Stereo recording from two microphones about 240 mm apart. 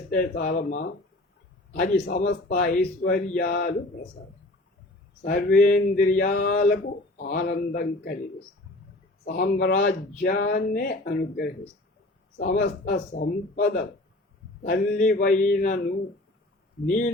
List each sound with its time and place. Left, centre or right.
0.2 s speech: left
5.2 s speech: left
9.2 s speech: left